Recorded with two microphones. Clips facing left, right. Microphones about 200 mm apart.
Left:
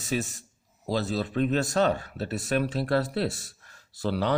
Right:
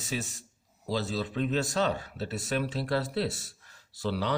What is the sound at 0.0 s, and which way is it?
A man's voice, 55° left (ahead or behind).